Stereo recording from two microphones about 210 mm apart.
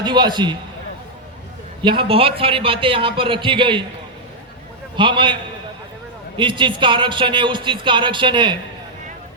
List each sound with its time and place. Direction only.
0.0 s a man's voice: 20° right (ahead or behind)
1.8 s a man's voice: 25° right (ahead or behind)
4.9 s a man's voice: 25° right (ahead or behind)